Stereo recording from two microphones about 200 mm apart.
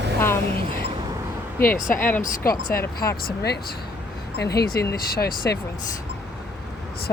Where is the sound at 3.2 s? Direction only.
55° left (ahead or behind).